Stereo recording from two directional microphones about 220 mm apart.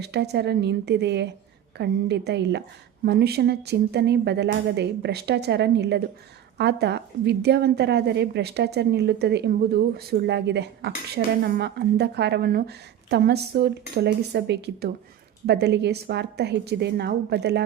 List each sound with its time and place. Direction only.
0.0 s a woman's voice: 50° right (ahead or behind)